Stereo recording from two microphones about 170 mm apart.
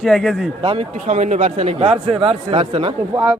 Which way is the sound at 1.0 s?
45° right (ahead or behind).